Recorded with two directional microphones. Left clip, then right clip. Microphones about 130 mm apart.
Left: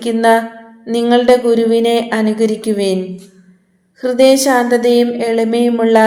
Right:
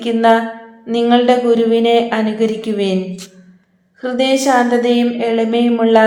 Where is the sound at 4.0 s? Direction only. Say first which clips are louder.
Left 5 dB; 45° left (ahead or behind).